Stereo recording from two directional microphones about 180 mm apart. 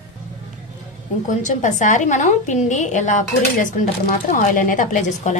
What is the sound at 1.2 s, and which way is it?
A woman's voice, 45° left (ahead or behind).